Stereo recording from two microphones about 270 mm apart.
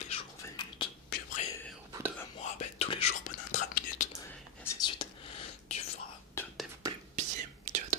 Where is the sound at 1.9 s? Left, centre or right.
Centre.